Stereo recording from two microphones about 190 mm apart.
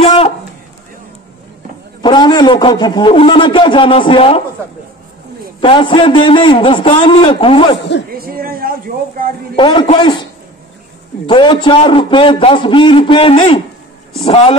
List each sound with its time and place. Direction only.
0.0 s a sound: 30° left (ahead or behind)
2.0 s a man's voice: 25° left (ahead or behind)
5.6 s a man's voice: 25° left (ahead or behind)
8.2 s a woman's voice: 50° right (ahead or behind)
9.6 s a man's voice: 25° left (ahead or behind)
11.2 s a man's voice: 25° left (ahead or behind)